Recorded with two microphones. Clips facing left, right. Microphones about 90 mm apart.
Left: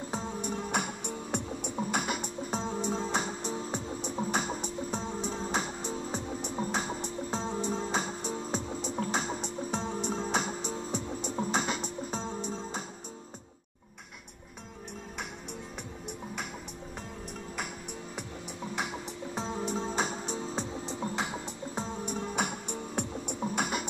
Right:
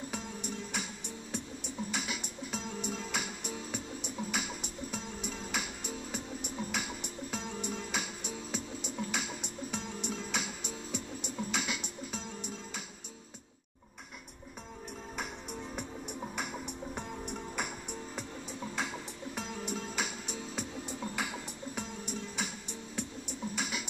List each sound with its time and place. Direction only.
0.1 s music: 40° left (ahead or behind)
19.3 s music: 30° left (ahead or behind)
22.0 s music: 45° left (ahead or behind)